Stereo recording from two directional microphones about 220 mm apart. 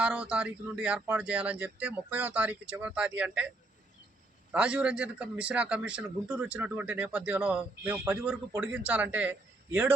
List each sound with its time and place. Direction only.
0.0 s a man's voice: 5° right (ahead or behind)
4.5 s a man's voice: 5° right (ahead or behind)